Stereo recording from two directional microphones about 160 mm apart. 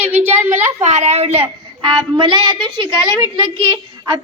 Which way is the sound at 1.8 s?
30° right (ahead or behind).